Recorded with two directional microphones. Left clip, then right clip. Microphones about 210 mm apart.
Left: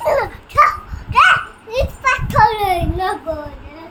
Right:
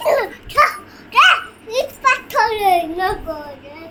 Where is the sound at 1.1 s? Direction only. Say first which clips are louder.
Even; 10° left (ahead or behind).